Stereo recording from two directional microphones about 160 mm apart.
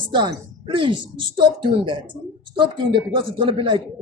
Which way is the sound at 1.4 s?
30° right (ahead or behind).